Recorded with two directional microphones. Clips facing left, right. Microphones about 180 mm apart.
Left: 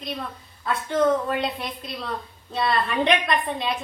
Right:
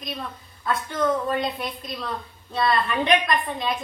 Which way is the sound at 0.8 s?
30° left (ahead or behind).